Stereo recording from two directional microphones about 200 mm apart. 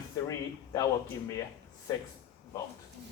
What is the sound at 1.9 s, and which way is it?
Speech, 15° left (ahead or behind).